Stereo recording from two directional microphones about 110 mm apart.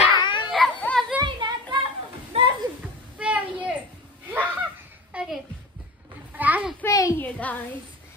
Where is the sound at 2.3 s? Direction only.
65° right (ahead or behind).